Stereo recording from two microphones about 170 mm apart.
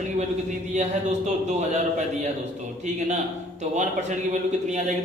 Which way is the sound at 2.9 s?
45° right (ahead or behind).